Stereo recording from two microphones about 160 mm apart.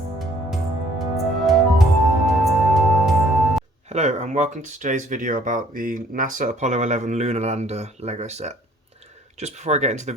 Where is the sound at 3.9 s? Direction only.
45° right (ahead or behind).